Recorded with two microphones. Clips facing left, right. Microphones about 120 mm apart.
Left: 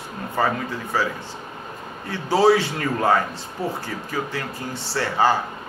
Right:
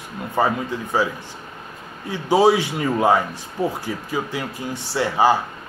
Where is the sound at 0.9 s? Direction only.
15° right (ahead or behind).